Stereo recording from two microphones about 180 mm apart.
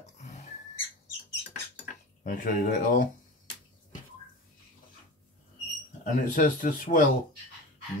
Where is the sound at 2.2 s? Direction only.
50° left (ahead or behind).